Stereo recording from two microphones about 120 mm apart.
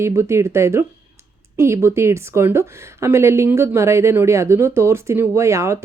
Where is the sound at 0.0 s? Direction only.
25° right (ahead or behind).